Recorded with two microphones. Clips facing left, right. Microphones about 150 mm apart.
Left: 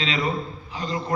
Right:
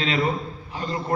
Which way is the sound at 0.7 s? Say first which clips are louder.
Right 1 dB; 50° right (ahead or behind).